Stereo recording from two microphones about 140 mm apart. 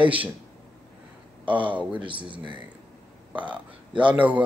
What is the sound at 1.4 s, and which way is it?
Speech, 10° right (ahead or behind).